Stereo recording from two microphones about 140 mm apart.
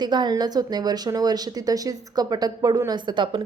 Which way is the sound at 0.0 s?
30° right (ahead or behind).